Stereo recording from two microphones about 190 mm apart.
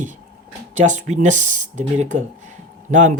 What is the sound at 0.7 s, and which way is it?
Speech, 40° right (ahead or behind).